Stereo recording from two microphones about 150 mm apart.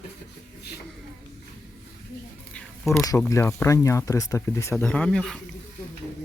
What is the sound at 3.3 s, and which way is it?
Speech, 20° left (ahead or behind).